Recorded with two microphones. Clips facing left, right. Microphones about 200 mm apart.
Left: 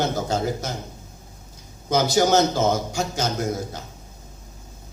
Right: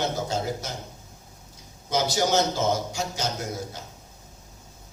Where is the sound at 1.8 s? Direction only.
50° left (ahead or behind).